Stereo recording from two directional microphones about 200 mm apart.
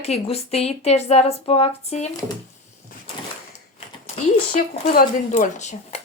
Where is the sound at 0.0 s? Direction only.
30° left (ahead or behind).